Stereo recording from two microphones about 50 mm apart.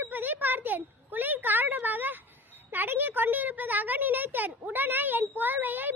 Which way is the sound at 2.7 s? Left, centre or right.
Right.